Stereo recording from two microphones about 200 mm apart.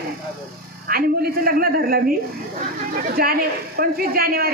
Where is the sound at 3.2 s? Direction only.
50° right (ahead or behind).